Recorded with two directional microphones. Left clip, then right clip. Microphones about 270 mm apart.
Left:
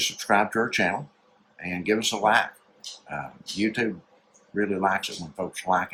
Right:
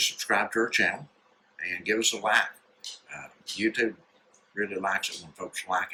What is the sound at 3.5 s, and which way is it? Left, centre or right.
Speech, centre.